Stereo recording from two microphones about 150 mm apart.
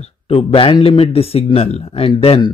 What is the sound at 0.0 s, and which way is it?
Speech, 45° left (ahead or behind).